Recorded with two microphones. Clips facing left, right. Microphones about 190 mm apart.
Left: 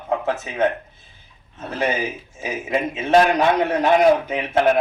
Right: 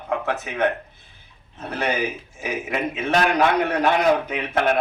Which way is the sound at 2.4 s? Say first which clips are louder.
Left 2 dB; 25° left (ahead or behind).